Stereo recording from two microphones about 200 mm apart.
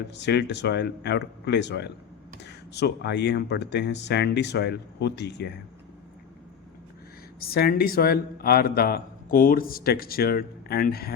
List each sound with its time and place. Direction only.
0.1 s speech: 60° left (ahead or behind)
7.3 s a man's voice: 50° left (ahead or behind)